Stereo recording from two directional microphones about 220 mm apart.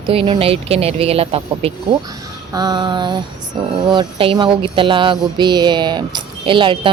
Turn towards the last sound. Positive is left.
turn(degrees=-20)  # may be behind; listen again after turning